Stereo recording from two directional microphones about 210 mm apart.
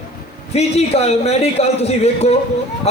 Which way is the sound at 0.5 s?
30° left (ahead or behind).